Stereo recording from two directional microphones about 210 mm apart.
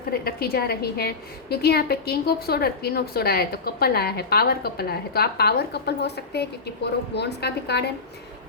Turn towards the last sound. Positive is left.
turn(degrees=50)  # may be behind; listen again after turning